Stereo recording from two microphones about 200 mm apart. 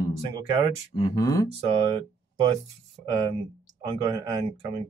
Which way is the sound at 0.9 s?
20° left (ahead or behind).